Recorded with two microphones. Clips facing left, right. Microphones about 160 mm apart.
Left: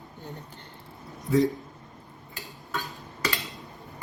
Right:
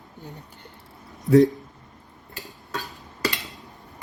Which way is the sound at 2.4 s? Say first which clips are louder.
Right 1 dB; 40° right (ahead or behind).